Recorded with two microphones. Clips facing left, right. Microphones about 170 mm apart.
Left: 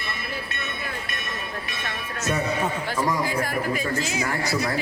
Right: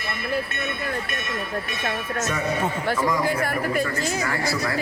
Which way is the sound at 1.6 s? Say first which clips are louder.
Right 5 dB; 45° right (ahead or behind).